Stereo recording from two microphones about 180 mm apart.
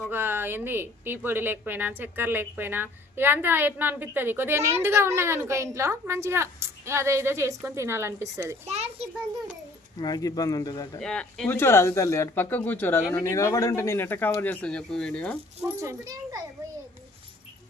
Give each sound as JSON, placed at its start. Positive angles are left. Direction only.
{"t": 0.1, "sound": "speech", "side_deg": -10}
{"t": 8.6, "sound": "a child's voice", "side_deg": -35}
{"t": 10.0, "sound": "speech", "side_deg": 20}
{"t": 11.0, "sound": "speech", "side_deg": 5}
{"t": 15.6, "sound": "speech", "side_deg": -15}